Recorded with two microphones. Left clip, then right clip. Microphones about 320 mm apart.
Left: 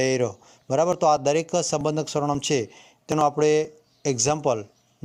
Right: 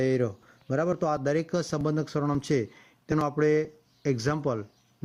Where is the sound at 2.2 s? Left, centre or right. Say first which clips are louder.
Left 5 dB; left.